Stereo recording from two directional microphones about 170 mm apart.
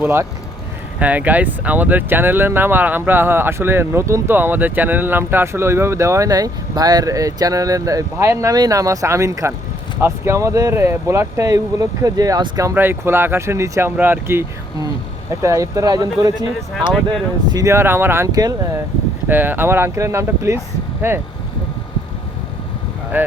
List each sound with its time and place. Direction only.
0.0 s speech: 15° right (ahead or behind)
17.5 s speech: 20° right (ahead or behind)
19.3 s speech: 10° right (ahead or behind)
23.1 s speech: 10° right (ahead or behind)